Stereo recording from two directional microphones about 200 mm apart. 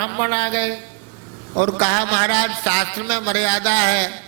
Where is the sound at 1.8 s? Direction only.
15° right (ahead or behind).